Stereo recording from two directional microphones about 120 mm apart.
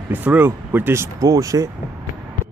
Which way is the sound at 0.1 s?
15° right (ahead or behind).